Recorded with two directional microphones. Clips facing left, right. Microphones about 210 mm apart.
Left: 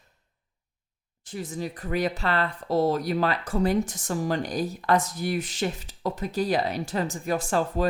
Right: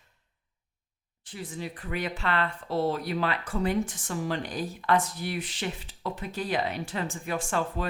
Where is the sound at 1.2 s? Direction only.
45° left (ahead or behind).